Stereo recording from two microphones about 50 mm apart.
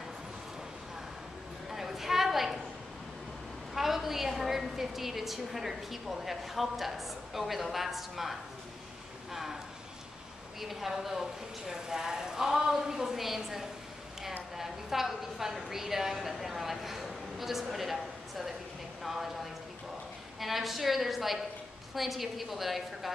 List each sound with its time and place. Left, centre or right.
1.7 s a sound: centre
3.7 s a woman's voice: centre
10.6 s a woman's voice: centre